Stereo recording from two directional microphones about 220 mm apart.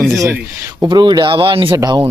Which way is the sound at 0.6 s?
15° right (ahead or behind).